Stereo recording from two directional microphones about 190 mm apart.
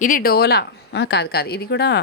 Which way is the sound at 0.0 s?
50° left (ahead or behind).